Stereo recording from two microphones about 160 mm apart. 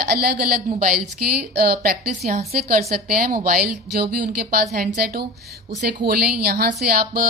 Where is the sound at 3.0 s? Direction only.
65° right (ahead or behind).